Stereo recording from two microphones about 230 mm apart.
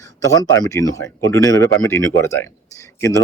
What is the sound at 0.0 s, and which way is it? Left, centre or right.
Speech, centre.